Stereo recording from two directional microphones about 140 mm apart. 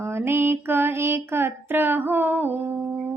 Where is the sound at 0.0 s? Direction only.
15° right (ahead or behind).